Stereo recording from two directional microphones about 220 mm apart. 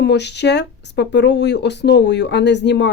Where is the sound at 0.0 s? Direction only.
50° left (ahead or behind).